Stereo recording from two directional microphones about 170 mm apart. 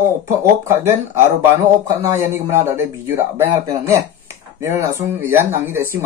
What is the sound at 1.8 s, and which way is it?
Speech, 20° right (ahead or behind).